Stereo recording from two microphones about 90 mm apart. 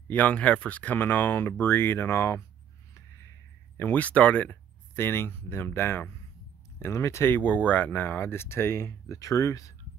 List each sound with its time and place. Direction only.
0.1 s speech: 15° left (ahead or behind)
3.7 s speech: 20° left (ahead or behind); by 9.8 s 40° left (ahead or behind)